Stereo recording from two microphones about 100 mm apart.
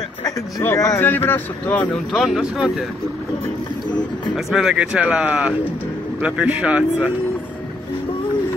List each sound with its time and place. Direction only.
0.7 s speech: 35° left (ahead or behind)
1.0 s speech: 20° left (ahead or behind)
2.1 s speech: centre (ahead or behind)
4.5 s speech: 5° right (ahead or behind)